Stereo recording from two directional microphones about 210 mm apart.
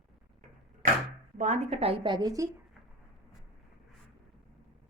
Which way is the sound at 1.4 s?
35° right (ahead or behind).